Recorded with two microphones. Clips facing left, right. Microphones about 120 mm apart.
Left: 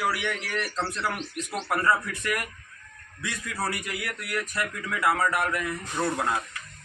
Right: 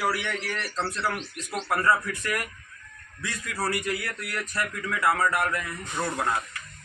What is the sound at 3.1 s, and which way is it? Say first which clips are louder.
A man's voice: even; 20° left (ahead or behind).